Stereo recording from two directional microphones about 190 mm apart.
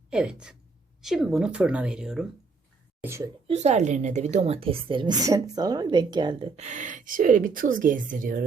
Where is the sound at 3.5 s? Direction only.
35° right (ahead or behind).